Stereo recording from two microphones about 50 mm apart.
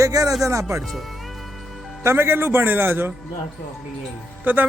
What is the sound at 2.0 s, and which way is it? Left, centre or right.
A man's voice, right.